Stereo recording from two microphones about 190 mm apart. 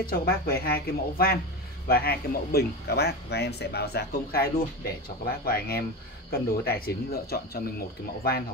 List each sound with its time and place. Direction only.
0.0 s speech: 55° left (ahead or behind)